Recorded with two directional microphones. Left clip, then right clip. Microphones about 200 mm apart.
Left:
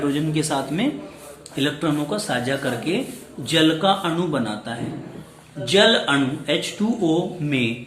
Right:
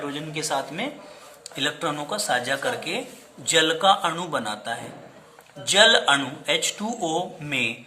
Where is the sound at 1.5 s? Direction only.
25° right (ahead or behind).